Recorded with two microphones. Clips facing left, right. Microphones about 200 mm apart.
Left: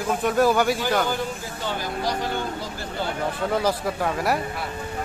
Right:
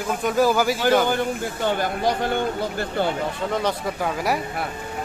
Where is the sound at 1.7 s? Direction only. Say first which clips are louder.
Right 4 dB; 55° right (ahead or behind).